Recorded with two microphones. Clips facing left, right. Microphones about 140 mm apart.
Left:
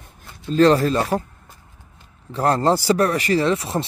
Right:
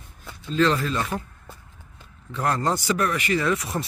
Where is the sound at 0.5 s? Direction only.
40° left (ahead or behind).